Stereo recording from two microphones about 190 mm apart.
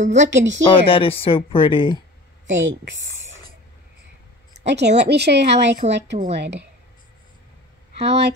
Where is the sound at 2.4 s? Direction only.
80° right.